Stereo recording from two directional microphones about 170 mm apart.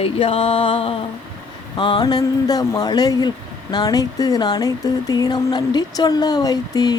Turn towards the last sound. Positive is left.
turn(degrees=20)  # may be behind; listen again after turning